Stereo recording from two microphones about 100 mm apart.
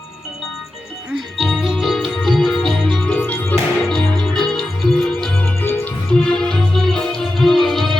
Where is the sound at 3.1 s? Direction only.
20° left (ahead or behind).